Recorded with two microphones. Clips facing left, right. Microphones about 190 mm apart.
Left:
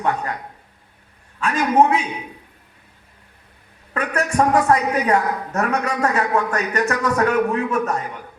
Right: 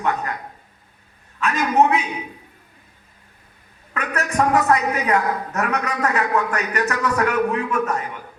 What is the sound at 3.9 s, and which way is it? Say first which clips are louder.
A man's voice: left 2 dB; 30° left (ahead or behind).